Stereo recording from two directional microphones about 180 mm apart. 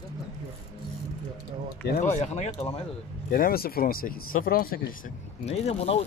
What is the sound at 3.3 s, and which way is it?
Speech, 55° left (ahead or behind).